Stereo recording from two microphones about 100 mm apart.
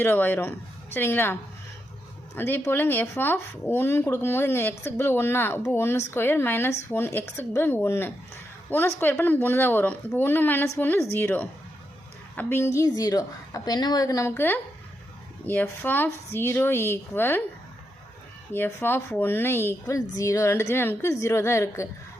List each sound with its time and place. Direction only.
0.0 s a woman's voice: 20° left (ahead or behind); by 14.3 s 40° left (ahead or behind)
14.3 s speech: 20° left (ahead or behind)
18.5 s speech: 20° left (ahead or behind)